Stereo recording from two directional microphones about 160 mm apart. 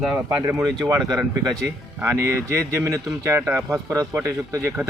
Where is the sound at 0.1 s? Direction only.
15° right (ahead or behind).